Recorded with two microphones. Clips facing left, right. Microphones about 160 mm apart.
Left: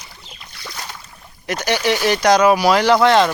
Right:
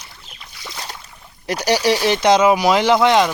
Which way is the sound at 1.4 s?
35° right (ahead or behind).